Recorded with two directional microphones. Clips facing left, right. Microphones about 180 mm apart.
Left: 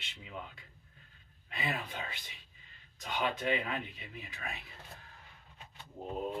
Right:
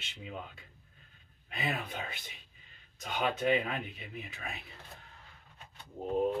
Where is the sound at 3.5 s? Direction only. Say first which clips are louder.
Right 3 dB; 35° right (ahead or behind).